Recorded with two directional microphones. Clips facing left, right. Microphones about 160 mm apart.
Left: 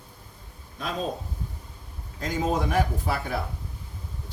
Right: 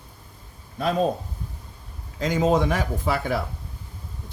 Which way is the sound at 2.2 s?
90° right.